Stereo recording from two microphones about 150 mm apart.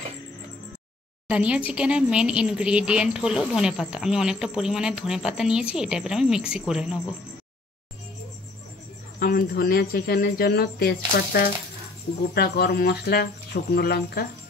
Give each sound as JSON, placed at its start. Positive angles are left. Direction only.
{"t": 1.3, "sound": "a woman's voice", "side_deg": -10}
{"t": 9.2, "sound": "speech", "side_deg": 80}